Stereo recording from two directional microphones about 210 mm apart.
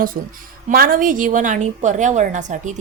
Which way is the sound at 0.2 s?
40° right (ahead or behind).